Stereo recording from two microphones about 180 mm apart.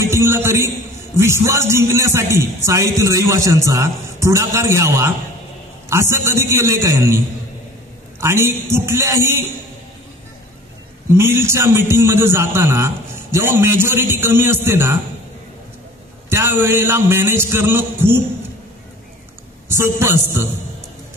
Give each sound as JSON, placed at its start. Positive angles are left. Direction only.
{"t": 0.0, "sound": "a man's voice", "side_deg": -15}
{"t": 8.2, "sound": "a man's voice", "side_deg": -15}
{"t": 11.1, "sound": "a man's voice", "side_deg": -15}
{"t": 16.3, "sound": "a man's voice", "side_deg": -15}
{"t": 19.7, "sound": "a man's voice", "side_deg": -15}